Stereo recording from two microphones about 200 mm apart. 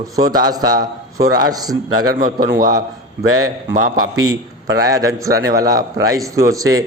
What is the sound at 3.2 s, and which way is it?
Speech, 90° right.